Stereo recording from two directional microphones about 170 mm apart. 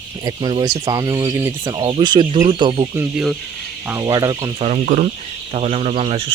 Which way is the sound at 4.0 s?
20° right (ahead or behind).